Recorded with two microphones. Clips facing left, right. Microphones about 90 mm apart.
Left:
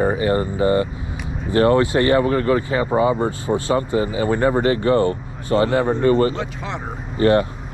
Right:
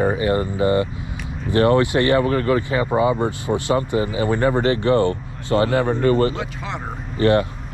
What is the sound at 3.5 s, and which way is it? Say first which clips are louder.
Speech: left 2 dB; 45° left (ahead or behind).